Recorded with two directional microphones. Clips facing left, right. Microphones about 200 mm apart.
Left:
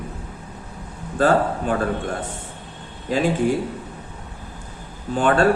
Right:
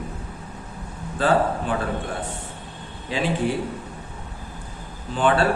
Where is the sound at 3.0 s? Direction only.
45° left (ahead or behind).